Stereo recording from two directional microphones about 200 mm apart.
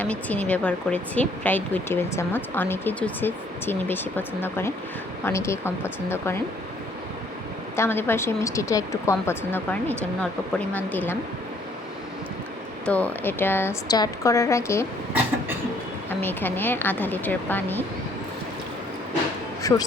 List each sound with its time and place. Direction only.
0.0 s speech: 10° left (ahead or behind)
7.8 s speech: 10° left (ahead or behind)
10.8 s speech: 10° left (ahead or behind)
12.8 s speech: 5° left (ahead or behind)
16.0 s speech: 10° left (ahead or behind)
19.6 s speech: 15° left (ahead or behind)